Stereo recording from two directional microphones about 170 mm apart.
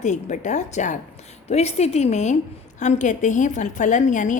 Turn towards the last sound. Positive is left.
turn(degrees=50)  # may be behind; listen again after turning